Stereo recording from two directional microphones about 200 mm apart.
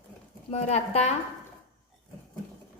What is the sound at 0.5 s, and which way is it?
Speech, 30° left (ahead or behind).